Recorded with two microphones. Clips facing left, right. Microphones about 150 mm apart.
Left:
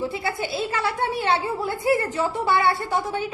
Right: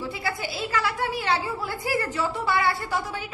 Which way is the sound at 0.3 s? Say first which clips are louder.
Left 3 dB; 25° left (ahead or behind).